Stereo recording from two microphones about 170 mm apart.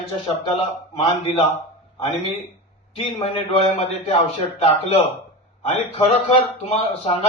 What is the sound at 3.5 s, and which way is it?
A man's voice, 35° left (ahead or behind).